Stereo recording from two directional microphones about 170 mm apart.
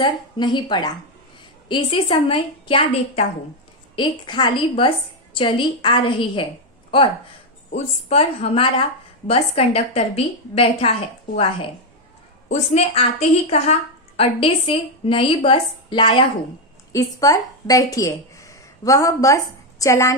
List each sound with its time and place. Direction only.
0.0 s a woman's voice: 25° left (ahead or behind)
7.7 s a woman's voice: 35° left (ahead or behind); by 20.2 s 15° left (ahead or behind)